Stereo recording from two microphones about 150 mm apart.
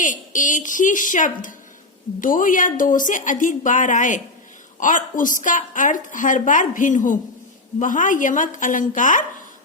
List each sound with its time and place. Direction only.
0.0 s a woman's voice: 60° left (ahead or behind)